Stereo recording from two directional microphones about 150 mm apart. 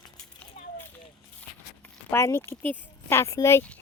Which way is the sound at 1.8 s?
15° left (ahead or behind).